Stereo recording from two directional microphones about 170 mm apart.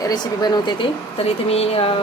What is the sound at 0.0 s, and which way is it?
Speech, 25° left (ahead or behind).